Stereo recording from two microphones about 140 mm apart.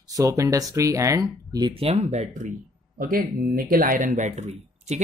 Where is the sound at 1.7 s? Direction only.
45° right (ahead or behind).